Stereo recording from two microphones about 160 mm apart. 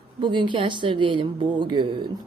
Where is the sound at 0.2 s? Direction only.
30° right (ahead or behind).